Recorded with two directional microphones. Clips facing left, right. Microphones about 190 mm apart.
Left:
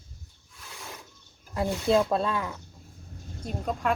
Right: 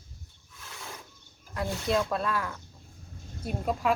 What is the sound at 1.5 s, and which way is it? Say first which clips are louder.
Speech: left 5 dB; 25° left (ahead or behind).